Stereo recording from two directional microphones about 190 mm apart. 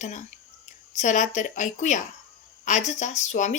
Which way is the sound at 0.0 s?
40° left (ahead or behind).